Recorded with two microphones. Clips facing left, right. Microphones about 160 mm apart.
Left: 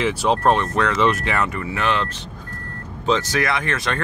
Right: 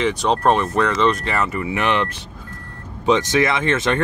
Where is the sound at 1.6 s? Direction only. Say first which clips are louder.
Right 2 dB; 20° right (ahead or behind).